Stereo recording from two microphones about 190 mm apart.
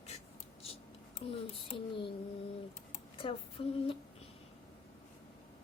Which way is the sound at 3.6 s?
30° left (ahead or behind).